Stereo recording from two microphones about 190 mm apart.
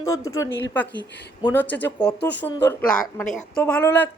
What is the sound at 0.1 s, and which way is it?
Speech, 15° left (ahead or behind).